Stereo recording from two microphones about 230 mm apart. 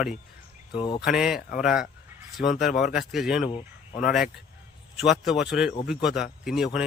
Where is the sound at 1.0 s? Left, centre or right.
Centre.